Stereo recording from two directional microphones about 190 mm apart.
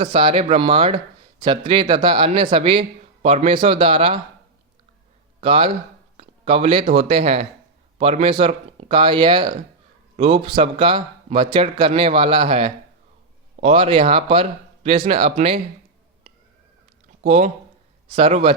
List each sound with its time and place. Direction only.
0.1 s speech: 25° right (ahead or behind)
5.4 s speech: 30° right (ahead or behind)
6.1 s a sound: 35° right (ahead or behind)
6.9 s speech: 35° right (ahead or behind)
17.2 s speech: 35° right (ahead or behind)